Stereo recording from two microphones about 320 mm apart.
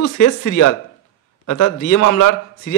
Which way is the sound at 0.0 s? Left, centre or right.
Left.